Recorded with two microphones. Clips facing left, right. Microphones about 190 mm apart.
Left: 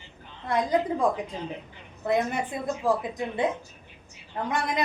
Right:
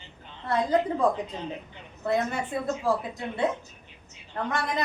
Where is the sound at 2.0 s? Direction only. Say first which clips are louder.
Left 1 dB; 15° left (ahead or behind).